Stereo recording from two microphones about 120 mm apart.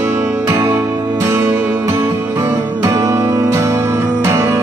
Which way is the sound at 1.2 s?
20° right (ahead or behind).